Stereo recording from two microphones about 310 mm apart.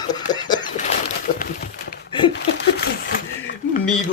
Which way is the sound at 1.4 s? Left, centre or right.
Left.